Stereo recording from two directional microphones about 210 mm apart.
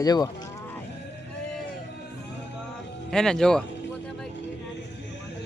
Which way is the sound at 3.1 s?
5° left (ahead or behind).